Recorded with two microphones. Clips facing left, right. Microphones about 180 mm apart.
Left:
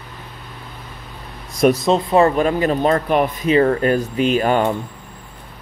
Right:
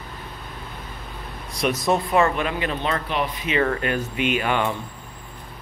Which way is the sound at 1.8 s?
20° left (ahead or behind).